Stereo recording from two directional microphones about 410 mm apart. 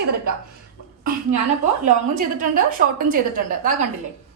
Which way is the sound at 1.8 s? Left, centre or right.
Centre.